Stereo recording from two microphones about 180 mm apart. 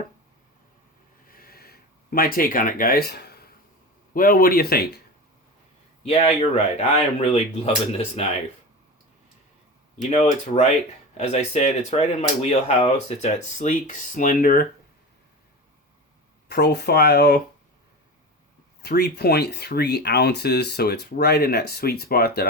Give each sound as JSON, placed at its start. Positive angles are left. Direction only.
{"t": 1.3, "sound": "a sound", "side_deg": 55}
{"t": 4.1, "sound": "speech", "side_deg": 50}
{"t": 6.0, "sound": "speech", "side_deg": 35}
{"t": 10.1, "sound": "speech", "side_deg": 40}
{"t": 16.5, "sound": "speech", "side_deg": 65}
{"t": 18.8, "sound": "speech", "side_deg": 65}